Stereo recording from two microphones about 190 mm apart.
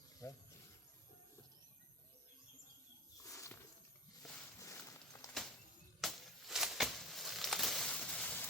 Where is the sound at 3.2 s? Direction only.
15° left (ahead or behind).